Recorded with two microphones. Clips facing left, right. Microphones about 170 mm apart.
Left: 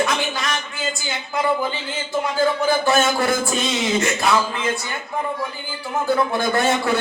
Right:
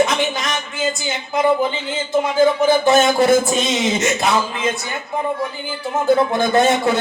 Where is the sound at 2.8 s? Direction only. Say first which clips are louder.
Right 5 dB; 20° right (ahead or behind).